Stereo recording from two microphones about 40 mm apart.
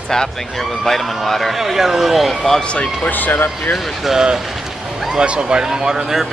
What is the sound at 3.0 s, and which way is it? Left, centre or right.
Speech, left.